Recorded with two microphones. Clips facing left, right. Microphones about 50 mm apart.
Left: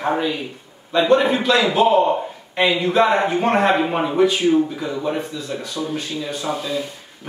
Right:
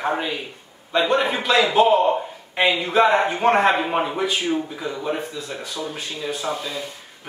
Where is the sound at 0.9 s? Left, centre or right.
Centre.